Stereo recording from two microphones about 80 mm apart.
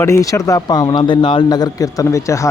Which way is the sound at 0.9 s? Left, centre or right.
Left.